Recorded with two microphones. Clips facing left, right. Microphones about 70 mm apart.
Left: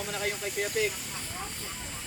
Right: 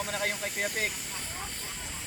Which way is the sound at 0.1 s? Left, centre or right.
Right.